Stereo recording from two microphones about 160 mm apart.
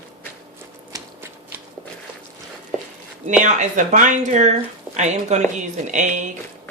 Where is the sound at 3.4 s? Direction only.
50° right (ahead or behind).